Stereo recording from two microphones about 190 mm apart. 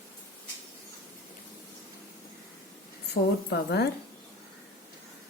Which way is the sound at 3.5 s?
60° left (ahead or behind).